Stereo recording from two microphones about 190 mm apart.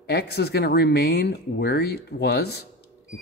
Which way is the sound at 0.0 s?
60° left (ahead or behind).